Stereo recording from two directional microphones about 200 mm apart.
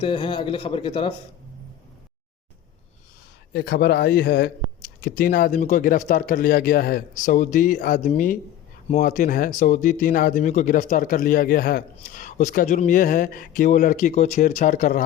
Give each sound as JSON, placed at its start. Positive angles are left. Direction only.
{"t": 0.0, "sound": "a man's voice", "side_deg": 25}
{"t": 3.5, "sound": "speech", "side_deg": 50}